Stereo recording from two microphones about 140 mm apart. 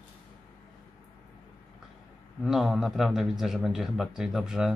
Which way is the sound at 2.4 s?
Centre (ahead or behind).